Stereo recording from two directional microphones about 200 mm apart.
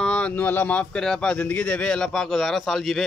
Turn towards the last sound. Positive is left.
turn(degrees=0)  # may be behind; listen again after turning